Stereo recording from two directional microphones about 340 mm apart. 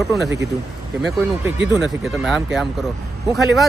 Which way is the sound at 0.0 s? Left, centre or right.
Centre.